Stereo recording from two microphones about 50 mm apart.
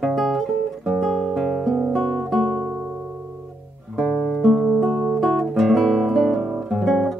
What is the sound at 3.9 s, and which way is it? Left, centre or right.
Guitar, centre.